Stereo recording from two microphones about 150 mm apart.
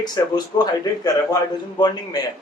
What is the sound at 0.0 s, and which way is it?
Speech, 25° left (ahead or behind).